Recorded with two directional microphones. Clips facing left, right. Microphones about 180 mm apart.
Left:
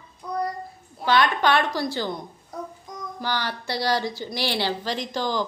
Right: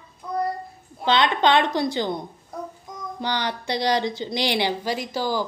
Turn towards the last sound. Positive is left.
turn(degrees=-10)  # may be behind; listen again after turning